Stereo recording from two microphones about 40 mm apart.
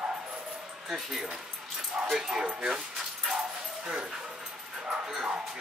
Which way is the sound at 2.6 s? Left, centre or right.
Centre.